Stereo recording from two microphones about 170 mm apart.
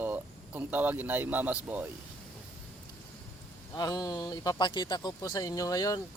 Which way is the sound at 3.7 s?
20° left (ahead or behind).